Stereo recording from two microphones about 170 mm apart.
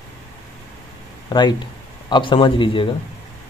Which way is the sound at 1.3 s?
25° left (ahead or behind).